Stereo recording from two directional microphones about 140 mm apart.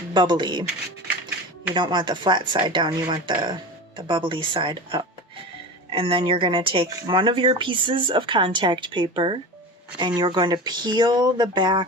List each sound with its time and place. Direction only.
0.1 s speech: 30° right (ahead or behind)
1.7 s speech: 35° right (ahead or behind)